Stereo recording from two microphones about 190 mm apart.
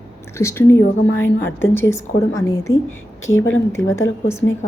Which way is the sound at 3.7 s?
15° left (ahead or behind).